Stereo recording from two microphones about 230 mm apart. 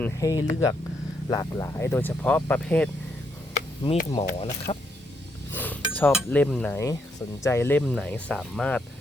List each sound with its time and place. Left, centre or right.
0.0 s speech: centre
3.5 s chop: left
4.1 s speech: left
5.5 s cutlery: centre
7.4 s speech: centre